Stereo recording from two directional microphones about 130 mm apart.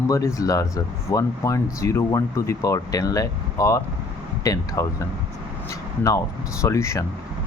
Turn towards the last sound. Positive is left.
turn(degrees=25)  # may be behind; listen again after turning